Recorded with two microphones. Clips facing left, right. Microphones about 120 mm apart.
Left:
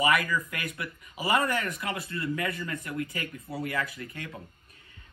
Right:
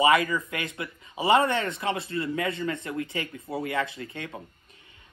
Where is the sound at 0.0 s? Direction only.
25° right (ahead or behind).